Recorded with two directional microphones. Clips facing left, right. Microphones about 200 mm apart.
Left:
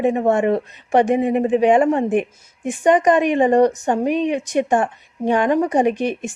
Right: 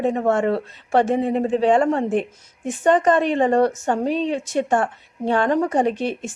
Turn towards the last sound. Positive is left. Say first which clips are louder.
# left 3 dB
turn(degrees=15)  # may be behind; listen again after turning